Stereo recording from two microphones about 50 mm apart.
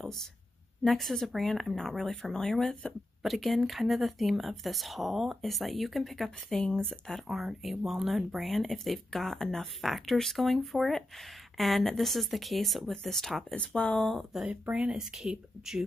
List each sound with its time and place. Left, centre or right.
0.0 s a woman's voice: centre
3.2 s speech: centre
7.2 s speech: centre
13.6 s speech: centre
14.5 s speech: right
15.1 s speech: centre